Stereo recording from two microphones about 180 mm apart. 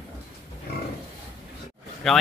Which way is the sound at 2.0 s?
Centre (ahead or behind).